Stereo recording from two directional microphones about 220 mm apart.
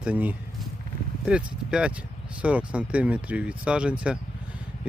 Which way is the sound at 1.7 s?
5° right (ahead or behind).